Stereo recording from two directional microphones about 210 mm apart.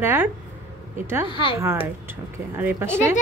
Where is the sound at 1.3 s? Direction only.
25° left (ahead or behind).